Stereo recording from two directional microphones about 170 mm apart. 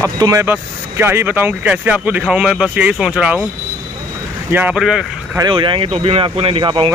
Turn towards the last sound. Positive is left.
turn(degrees=-30)  # may be behind; listen again after turning